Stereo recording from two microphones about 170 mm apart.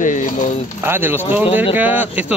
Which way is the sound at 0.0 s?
45° left (ahead or behind).